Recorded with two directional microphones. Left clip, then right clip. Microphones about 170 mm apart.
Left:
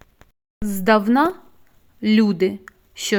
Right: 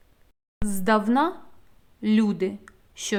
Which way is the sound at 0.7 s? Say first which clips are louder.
Left 5 dB; 30° left (ahead or behind).